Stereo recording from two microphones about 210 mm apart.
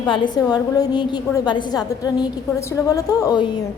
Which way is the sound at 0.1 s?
20° left (ahead or behind).